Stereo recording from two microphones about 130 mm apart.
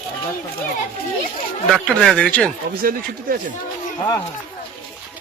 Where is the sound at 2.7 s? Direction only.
90° right.